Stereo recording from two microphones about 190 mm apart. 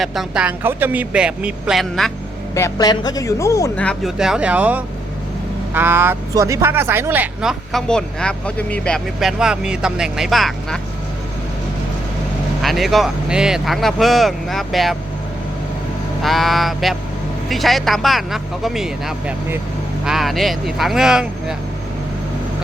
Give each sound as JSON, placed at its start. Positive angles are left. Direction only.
{"t": 0.0, "sound": "speech", "side_deg": 0}
{"t": 2.6, "sound": "speech", "side_deg": 15}
{"t": 7.7, "sound": "speech", "side_deg": 5}
{"t": 12.6, "sound": "speech", "side_deg": 0}
{"t": 16.2, "sound": "speech", "side_deg": 0}